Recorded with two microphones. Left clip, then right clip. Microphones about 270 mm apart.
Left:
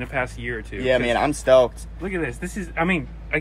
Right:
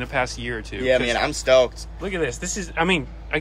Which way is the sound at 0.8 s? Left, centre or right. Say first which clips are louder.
Even; left.